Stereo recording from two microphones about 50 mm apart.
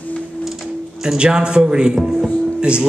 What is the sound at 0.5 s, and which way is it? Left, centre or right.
Music, centre.